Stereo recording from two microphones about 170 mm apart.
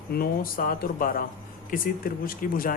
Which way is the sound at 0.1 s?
60° left (ahead or behind).